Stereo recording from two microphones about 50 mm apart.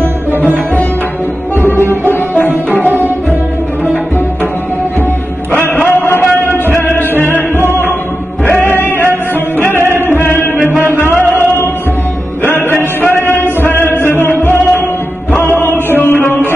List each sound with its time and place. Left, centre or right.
1.6 s music: left
2.7 s tabla: right
5.5 s music: left
8.5 s music: left
8.7 s music: left
9.9 s chant: left
11.0 s music: left
12.4 s music: left